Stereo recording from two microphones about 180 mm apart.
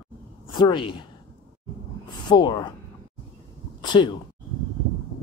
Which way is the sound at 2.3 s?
25° left (ahead or behind).